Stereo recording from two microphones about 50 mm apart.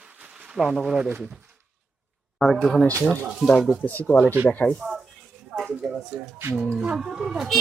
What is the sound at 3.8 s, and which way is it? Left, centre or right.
Speech, left.